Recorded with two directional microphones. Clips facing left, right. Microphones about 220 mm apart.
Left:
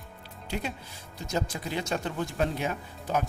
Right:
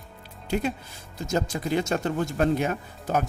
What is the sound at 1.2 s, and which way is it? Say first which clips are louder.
Speech: right 5 dB; 45° right (ahead or behind).